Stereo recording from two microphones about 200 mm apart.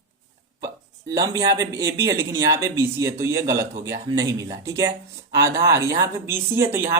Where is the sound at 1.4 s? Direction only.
20° right (ahead or behind).